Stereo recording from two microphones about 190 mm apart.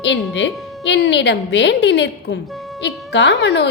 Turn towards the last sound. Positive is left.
turn(degrees=65)  # may be behind; listen again after turning